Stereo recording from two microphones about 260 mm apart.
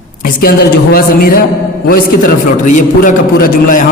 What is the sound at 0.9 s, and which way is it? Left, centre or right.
Speech, left.